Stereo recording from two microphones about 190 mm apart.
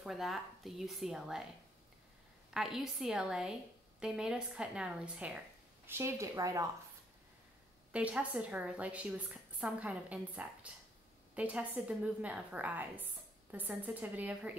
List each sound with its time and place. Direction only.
0.0 s a woman's voice: centre (ahead or behind)
2.5 s a woman's voice: centre (ahead or behind); by 6.7 s 15° right (ahead or behind)
7.9 s a woman's voice: 5° right (ahead or behind)